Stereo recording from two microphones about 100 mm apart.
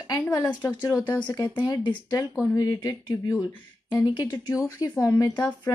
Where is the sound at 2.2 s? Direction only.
35° left (ahead or behind).